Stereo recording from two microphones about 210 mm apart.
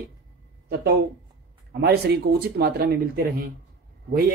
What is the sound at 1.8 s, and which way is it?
Speech, 50° right (ahead or behind).